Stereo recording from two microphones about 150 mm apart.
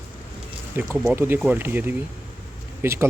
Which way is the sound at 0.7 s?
15° right (ahead or behind).